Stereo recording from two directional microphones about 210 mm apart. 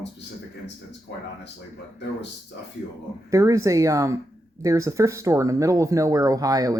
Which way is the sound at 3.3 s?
15° right (ahead or behind).